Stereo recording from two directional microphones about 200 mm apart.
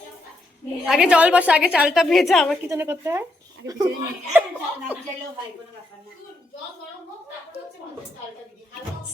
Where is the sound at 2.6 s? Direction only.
10° right (ahead or behind).